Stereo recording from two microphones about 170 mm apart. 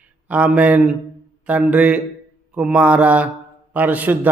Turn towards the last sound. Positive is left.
turn(degrees=-10)  # may be behind; listen again after turning